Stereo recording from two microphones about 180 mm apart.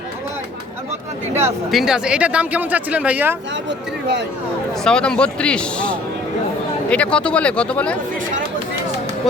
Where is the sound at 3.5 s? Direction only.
75° right (ahead or behind).